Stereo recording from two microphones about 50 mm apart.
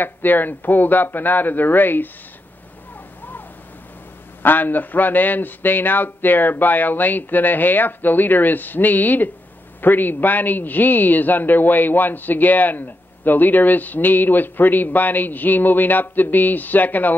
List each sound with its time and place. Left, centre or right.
0.0 s a man's voice: left
4.4 s a man's voice: left